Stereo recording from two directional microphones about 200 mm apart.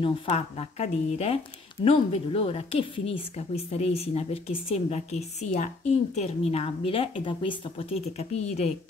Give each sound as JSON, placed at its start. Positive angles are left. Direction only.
{"t": 0.0, "sound": "a woman's voice", "side_deg": 30}